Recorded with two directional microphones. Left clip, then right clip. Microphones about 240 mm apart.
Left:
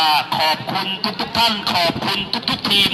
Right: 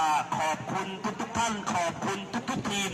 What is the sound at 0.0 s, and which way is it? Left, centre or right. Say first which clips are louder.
Honk: left 10 dB; left.